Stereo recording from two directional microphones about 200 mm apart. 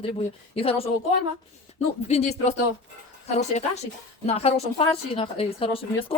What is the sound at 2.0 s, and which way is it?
A woman's voice, 35° left (ahead or behind).